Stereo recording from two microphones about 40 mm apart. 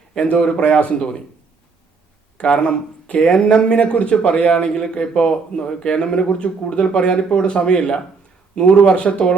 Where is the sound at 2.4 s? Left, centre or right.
Left.